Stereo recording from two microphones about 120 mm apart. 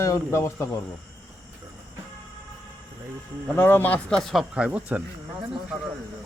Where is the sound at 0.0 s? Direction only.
25° left (ahead or behind).